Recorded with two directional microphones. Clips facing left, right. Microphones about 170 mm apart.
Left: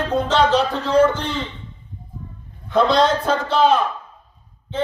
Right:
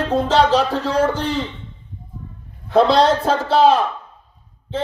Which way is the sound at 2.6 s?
35° right (ahead or behind).